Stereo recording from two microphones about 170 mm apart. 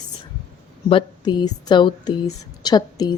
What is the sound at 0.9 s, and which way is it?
A woman's voice, 30° left (ahead or behind).